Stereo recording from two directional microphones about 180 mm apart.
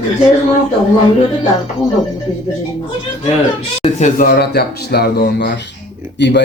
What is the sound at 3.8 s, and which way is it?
Speech, 40° left (ahead or behind).